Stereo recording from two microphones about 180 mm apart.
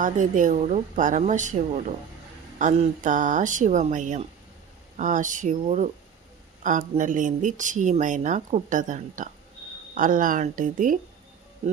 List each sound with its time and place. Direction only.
0.0 s speech: 45° right (ahead or behind)